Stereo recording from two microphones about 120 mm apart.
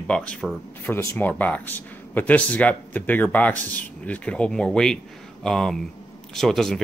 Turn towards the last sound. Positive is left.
turn(degrees=0)  # may be behind; listen again after turning